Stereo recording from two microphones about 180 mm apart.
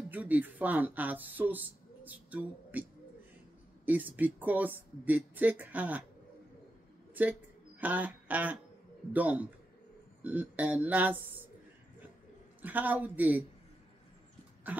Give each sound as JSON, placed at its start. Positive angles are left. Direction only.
{"t": 0.1, "sound": "speech", "side_deg": -10}
{"t": 3.8, "sound": "speech", "side_deg": -10}
{"t": 7.2, "sound": "a man's voice", "side_deg": -10}
{"t": 12.6, "sound": "speech", "side_deg": -10}
{"t": 14.7, "sound": "speech", "side_deg": -10}